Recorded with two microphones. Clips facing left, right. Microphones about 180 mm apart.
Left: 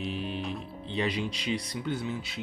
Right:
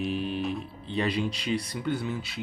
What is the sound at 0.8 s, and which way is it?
Speech, 20° left (ahead or behind).